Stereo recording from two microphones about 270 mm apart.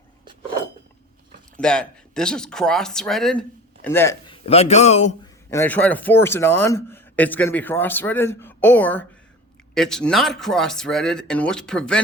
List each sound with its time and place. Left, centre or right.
1.5 s speech: centre
4.4 s a man's voice: left
5.5 s speech: centre